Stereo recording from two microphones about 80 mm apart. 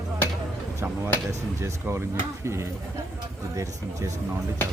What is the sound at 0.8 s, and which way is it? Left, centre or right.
Speech, right.